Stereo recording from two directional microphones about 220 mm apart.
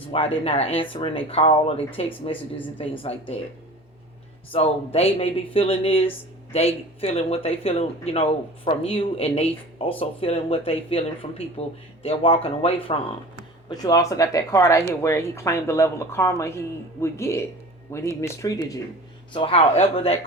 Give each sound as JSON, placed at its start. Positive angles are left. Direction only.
{"t": 0.4, "sound": "speech", "side_deg": 25}
{"t": 4.5, "sound": "speech", "side_deg": 25}